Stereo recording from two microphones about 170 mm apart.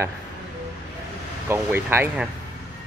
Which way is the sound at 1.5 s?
15° right (ahead or behind).